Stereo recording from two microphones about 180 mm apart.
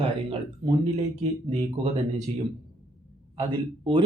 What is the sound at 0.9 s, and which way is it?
Speech, 35° right (ahead or behind).